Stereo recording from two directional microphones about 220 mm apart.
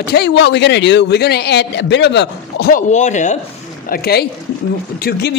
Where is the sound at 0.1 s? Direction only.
50° left (ahead or behind).